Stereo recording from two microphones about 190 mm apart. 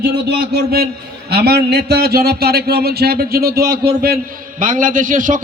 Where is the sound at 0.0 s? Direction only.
60° right (ahead or behind).